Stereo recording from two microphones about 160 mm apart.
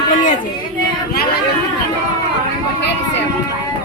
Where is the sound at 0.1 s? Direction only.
55° left (ahead or behind).